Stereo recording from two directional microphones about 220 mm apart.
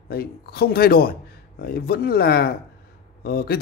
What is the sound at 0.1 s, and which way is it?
Speech, 45° left (ahead or behind).